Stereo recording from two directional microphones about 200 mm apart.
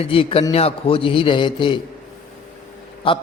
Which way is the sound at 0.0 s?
25° left (ahead or behind).